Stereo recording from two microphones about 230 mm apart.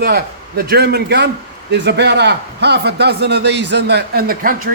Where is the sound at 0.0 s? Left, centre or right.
Right.